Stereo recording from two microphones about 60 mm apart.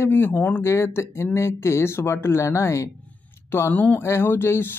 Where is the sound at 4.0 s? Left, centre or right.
Left.